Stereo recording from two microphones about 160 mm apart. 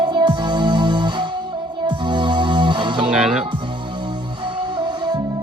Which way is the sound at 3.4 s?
30° right (ahead or behind).